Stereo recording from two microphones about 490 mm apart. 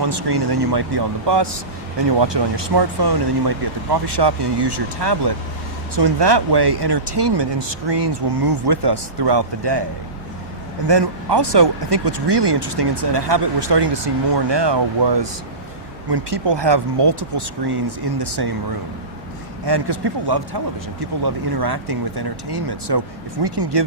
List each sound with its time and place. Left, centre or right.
0.0 s speech: right
10.8 s speech: right
19.6 s speech: right